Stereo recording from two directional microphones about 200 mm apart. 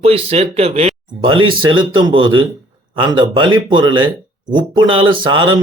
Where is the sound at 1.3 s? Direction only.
90° right.